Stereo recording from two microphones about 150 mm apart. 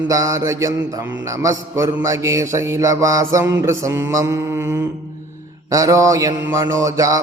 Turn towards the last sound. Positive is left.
turn(degrees=-20)  # may be behind; listen again after turning